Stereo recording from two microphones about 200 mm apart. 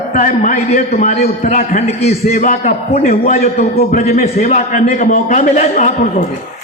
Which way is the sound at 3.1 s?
50° left (ahead or behind).